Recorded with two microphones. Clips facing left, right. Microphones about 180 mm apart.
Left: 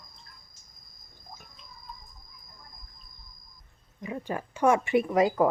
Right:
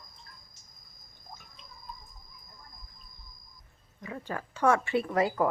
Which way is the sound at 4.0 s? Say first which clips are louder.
Left 4 dB; 20° left (ahead or behind).